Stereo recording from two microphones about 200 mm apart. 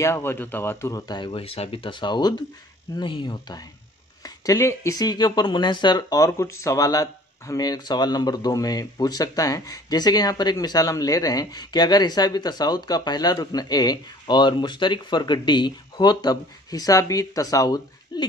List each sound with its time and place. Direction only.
0.0 s speech: 10° left (ahead or behind)